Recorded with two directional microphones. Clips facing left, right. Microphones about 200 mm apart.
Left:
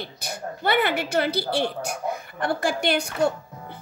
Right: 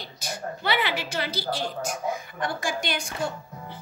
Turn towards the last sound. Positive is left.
turn(degrees=60)  # may be behind; listen again after turning